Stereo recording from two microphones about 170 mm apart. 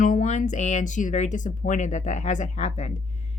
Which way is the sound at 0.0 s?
45° left (ahead or behind).